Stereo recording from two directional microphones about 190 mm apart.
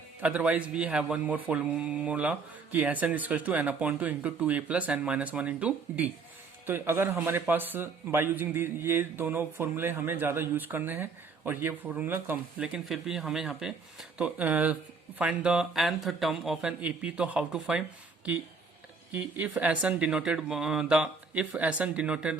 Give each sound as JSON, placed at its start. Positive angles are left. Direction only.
{"t": 0.2, "sound": "a man's voice", "side_deg": -5}
{"t": 19.1, "sound": "speech", "side_deg": -10}